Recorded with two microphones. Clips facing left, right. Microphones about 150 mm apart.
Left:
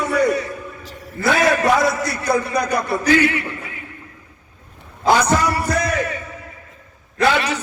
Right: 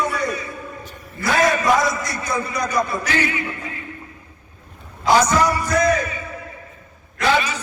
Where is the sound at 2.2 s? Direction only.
65° left (ahead or behind).